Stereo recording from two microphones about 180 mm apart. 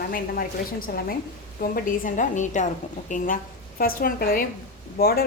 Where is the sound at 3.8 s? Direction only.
55° left (ahead or behind).